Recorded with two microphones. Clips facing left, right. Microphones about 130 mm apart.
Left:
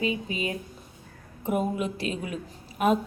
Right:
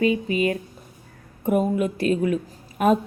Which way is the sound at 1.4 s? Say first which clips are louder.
Right 6 dB; 50° right (ahead or behind).